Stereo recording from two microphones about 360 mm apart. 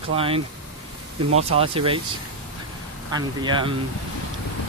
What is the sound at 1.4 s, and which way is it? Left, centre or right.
Speech, centre.